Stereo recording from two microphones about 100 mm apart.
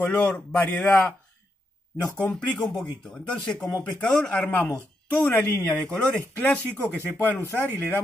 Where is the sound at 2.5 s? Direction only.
5° left (ahead or behind).